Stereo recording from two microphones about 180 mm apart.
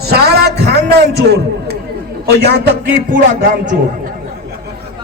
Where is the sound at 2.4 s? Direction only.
65° right (ahead or behind); by 3.8 s 50° right (ahead or behind).